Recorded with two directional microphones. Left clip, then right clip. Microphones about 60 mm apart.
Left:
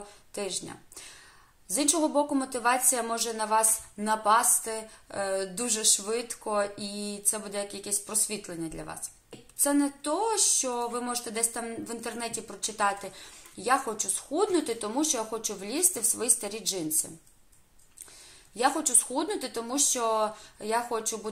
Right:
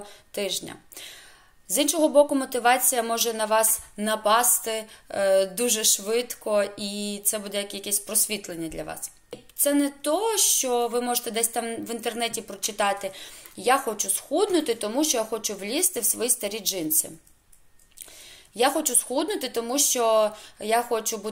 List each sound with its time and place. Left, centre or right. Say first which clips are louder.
0.0 s speech: right 5 dB; left
18.5 s speech: right 4 dB; left